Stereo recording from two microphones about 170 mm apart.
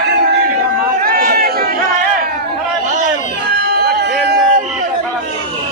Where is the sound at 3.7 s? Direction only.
65° right (ahead or behind).